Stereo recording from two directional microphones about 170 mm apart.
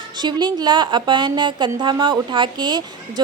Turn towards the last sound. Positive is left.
turn(degrees=-25)  # may be behind; listen again after turning